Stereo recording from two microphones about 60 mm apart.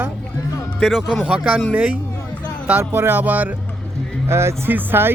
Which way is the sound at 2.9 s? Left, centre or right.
Right.